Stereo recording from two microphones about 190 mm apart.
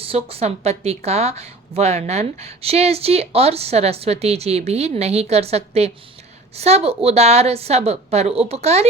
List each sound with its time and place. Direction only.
0.0 s speech: 30° right (ahead or behind)